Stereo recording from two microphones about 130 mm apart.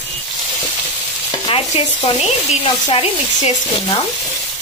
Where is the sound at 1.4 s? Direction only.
45° left (ahead or behind).